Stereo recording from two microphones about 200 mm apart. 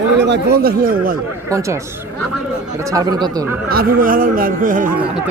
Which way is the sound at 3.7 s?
45° right (ahead or behind).